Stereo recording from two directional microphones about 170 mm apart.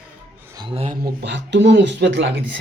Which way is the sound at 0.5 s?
30° right (ahead or behind).